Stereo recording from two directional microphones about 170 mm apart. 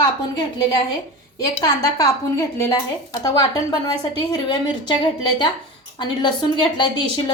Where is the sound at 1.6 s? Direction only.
20° left (ahead or behind).